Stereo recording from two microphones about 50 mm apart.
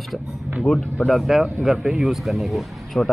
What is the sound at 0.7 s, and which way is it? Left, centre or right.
Speech, centre.